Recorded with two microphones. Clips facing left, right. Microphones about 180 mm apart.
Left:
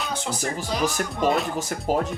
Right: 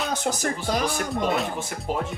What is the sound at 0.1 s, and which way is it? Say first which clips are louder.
Speech: right 2 dB; 40° right (ahead or behind).